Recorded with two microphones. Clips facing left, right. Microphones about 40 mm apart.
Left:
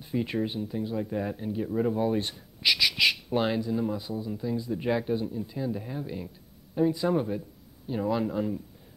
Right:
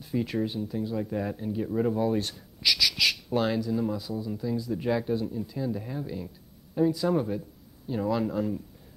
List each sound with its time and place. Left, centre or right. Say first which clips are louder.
0.1 s speech: even; centre
1.7 s speech: even; centre
2.0 s speech: even; centre
6.2 s a sound: even; centre
7.1 s speech: even; centre